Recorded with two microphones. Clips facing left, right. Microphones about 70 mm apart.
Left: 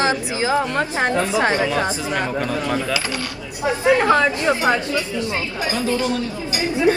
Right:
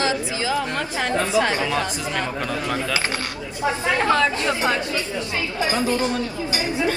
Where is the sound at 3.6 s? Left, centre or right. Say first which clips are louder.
Left 5 dB; left.